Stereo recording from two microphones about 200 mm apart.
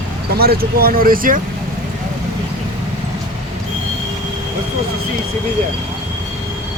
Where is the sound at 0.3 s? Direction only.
50° right (ahead or behind).